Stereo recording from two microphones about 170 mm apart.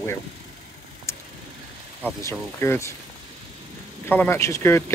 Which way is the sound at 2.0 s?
15° left (ahead or behind).